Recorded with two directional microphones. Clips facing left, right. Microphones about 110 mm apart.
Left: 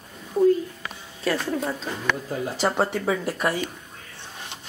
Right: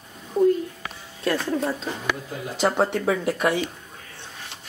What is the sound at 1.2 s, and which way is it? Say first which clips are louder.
Speech: right 1 dB; 5° left (ahead or behind).